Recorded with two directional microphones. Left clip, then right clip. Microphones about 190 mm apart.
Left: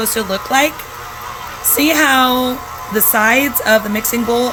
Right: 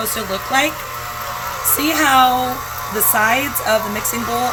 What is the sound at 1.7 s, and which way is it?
Speech, 65° left (ahead or behind).